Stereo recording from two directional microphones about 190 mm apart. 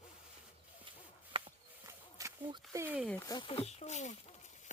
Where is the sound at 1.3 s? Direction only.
25° right (ahead or behind).